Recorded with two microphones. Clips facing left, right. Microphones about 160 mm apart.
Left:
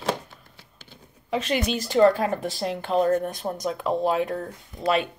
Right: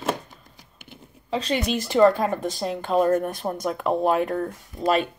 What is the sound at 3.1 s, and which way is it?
Speech, 45° right (ahead or behind).